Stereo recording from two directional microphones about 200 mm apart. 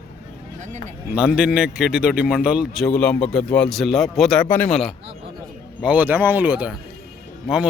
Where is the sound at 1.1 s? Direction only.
5° right (ahead or behind).